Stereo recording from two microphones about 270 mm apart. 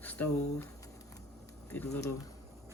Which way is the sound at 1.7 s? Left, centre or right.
Centre.